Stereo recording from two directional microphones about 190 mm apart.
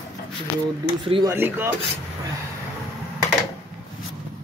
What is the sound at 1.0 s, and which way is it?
Speech, 30° right (ahead or behind).